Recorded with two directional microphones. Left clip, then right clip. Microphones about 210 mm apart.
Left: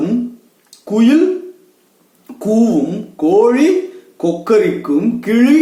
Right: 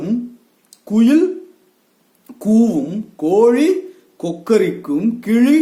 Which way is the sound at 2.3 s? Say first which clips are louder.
Left 2 dB; 50° right (ahead or behind).